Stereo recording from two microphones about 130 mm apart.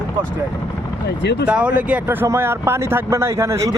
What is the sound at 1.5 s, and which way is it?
Speech, 10° right (ahead or behind).